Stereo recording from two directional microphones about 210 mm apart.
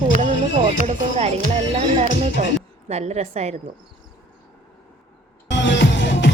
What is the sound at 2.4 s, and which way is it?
A woman's voice, 35° right (ahead or behind).